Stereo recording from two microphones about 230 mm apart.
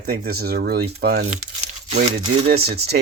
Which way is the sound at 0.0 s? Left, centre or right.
Right.